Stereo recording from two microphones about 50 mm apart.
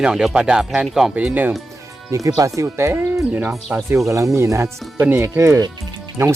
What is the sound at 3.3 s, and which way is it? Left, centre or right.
Speech, right.